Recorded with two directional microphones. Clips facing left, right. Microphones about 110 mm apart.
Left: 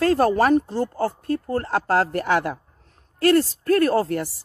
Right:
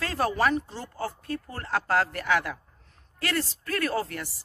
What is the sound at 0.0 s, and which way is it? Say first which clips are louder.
Speech: left 8 dB; 45° left (ahead or behind).